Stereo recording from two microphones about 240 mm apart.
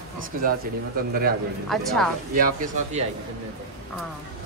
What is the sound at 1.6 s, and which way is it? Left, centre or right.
Speech, centre.